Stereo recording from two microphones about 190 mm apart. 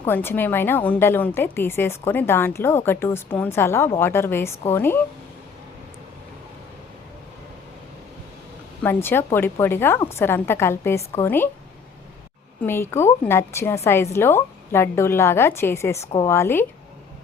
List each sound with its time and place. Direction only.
0.0 s a woman's voice: 10° left (ahead or behind)
8.8 s a woman's voice: 10° left (ahead or behind)
12.6 s a woman's voice: 15° left (ahead or behind)